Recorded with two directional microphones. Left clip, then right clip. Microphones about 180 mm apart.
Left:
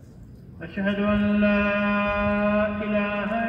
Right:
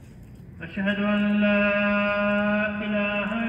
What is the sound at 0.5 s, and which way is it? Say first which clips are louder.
A man's voice: even; 20° left (ahead or behind).